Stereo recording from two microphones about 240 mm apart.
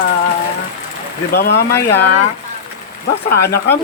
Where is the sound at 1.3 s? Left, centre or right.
Left.